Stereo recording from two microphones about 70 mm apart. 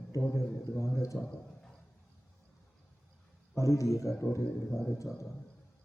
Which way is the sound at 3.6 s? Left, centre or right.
Left.